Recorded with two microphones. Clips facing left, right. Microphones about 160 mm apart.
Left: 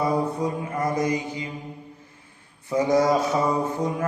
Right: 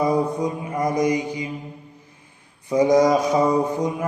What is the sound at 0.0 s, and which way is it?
Mantra, 15° right (ahead or behind).